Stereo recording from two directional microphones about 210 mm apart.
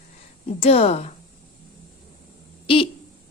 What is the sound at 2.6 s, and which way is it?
Speech, 25° left (ahead or behind).